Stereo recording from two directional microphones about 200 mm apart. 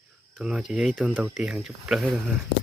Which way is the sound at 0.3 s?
5° right (ahead or behind).